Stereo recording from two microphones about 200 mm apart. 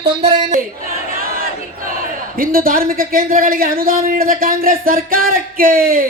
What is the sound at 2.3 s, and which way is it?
A woman's voice, 45° right (ahead or behind).